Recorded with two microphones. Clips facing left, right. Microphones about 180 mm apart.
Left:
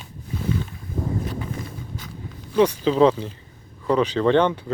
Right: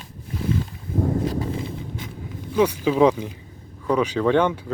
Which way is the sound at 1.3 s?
35° right (ahead or behind).